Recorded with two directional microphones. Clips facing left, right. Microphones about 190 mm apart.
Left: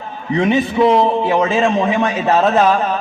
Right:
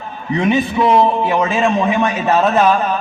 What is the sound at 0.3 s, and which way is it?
A man's voice, 30° left (ahead or behind).